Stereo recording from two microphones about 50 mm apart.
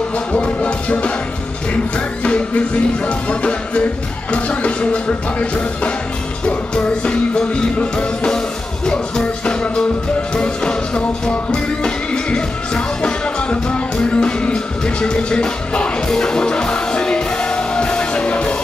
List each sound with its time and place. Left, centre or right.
0.3 s music: left
2.2 s music: left